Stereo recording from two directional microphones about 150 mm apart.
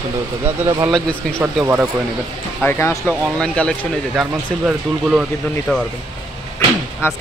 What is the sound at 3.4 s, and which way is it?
Speech, 5° left (ahead or behind).